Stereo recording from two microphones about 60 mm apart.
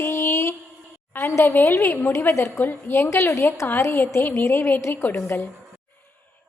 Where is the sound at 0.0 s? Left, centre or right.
Left.